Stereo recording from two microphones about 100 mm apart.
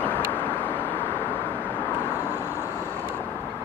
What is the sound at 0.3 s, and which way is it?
Vehicle, 20° left (ahead or behind).